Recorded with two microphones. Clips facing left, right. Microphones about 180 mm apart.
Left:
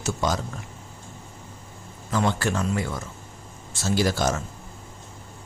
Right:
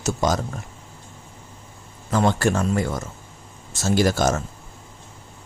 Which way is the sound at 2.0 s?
45° right (ahead or behind).